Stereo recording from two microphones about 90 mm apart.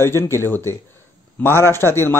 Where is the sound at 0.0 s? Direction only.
30° left (ahead or behind).